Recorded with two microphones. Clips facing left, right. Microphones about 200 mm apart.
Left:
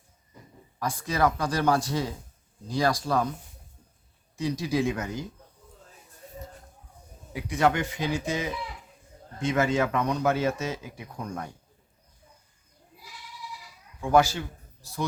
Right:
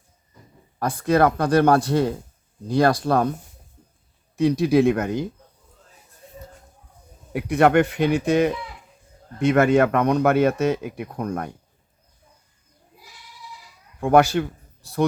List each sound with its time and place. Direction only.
0.8 s speech: 60° right (ahead or behind)
4.4 s speech: 60° right (ahead or behind)
7.3 s speech: 60° right (ahead or behind)
14.0 s a man's voice: 60° right (ahead or behind)